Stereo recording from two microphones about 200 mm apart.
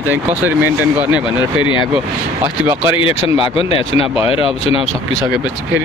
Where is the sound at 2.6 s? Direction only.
5° right (ahead or behind).